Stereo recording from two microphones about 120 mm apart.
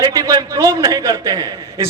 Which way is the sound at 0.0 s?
30° right (ahead or behind).